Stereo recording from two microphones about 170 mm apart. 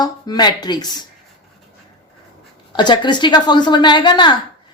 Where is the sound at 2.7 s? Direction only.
25° left (ahead or behind).